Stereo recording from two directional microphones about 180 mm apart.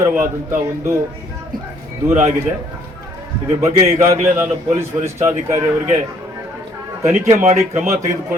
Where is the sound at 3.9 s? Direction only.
15° right (ahead or behind).